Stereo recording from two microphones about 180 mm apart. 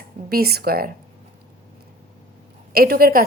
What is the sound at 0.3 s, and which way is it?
Speech, 60° right (ahead or behind).